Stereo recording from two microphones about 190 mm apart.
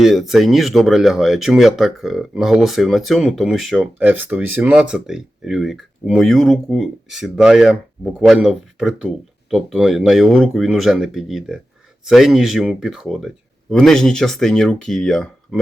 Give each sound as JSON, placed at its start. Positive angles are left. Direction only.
{"t": 0.0, "sound": "speech", "side_deg": 0}